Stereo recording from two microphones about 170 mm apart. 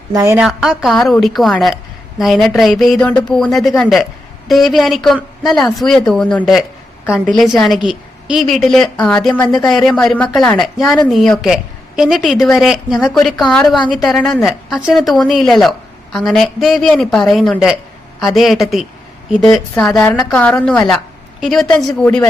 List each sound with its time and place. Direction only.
0.1 s a woman's voice: 20° right (ahead or behind)
0.3 s a woman's voice: centre (ahead or behind)
7.0 s a woman's voice: 10° left (ahead or behind)